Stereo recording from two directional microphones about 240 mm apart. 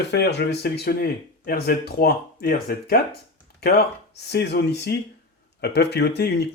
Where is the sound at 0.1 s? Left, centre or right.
Left.